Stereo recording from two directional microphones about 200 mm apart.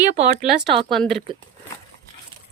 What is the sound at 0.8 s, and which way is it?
Speech, centre (ahead or behind).